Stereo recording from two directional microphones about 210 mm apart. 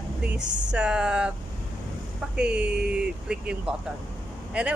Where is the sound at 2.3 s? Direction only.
5° right (ahead or behind).